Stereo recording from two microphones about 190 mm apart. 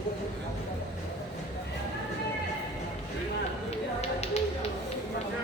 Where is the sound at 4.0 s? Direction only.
35° left (ahead or behind).